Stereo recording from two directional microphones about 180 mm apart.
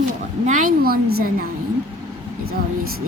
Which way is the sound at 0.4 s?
45° right (ahead or behind).